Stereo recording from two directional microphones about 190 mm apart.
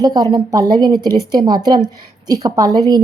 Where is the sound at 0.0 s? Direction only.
20° right (ahead or behind).